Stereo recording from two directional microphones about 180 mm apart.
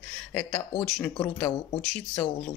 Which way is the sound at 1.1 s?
20° left (ahead or behind).